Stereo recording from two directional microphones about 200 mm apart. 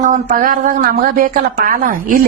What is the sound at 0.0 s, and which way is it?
A woman's voice, 40° right (ahead or behind).